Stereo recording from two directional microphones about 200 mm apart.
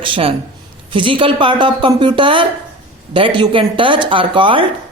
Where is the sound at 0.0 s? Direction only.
25° right (ahead or behind).